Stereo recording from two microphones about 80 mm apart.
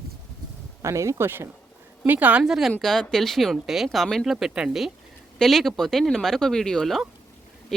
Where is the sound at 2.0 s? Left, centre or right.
Right.